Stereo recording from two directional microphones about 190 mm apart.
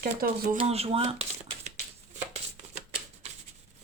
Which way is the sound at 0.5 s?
30° right (ahead or behind).